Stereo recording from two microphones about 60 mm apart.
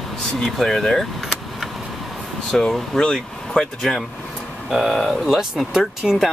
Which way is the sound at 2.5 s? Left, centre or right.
Centre.